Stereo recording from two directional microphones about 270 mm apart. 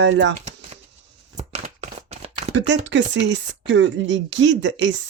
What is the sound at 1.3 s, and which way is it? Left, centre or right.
Shuffling cards, right.